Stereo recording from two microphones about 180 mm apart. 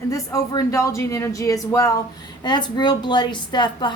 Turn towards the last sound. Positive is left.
turn(degrees=25)  # may be behind; listen again after turning